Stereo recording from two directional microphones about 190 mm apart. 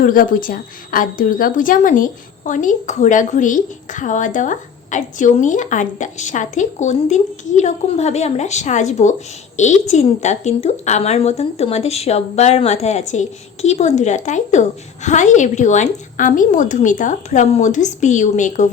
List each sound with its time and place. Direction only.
0.0 s a woman's voice: 45° left (ahead or behind)